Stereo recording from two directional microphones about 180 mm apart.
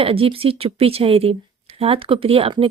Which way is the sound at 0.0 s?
30° right (ahead or behind).